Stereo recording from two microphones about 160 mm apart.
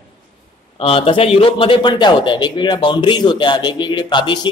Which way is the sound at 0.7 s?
35° left (ahead or behind).